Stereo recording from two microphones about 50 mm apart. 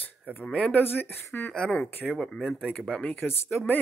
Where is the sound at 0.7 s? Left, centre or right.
Left.